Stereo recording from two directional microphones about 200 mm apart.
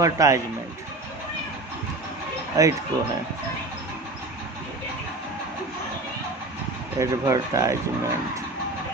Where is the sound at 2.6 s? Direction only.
15° right (ahead or behind).